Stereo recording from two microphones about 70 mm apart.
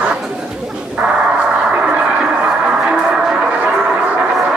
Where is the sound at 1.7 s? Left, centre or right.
Centre.